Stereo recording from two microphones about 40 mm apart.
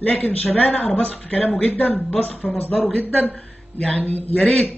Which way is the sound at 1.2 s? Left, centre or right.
Left.